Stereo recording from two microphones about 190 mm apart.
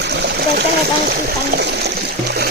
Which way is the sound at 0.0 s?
60° right (ahead or behind).